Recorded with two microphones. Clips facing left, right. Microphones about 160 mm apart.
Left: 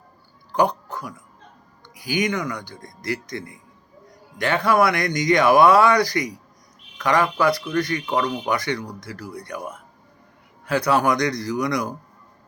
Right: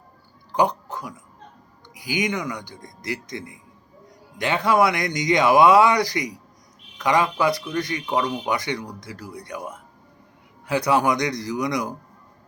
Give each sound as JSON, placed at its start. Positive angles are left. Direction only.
{"t": 0.5, "sound": "speech", "side_deg": -20}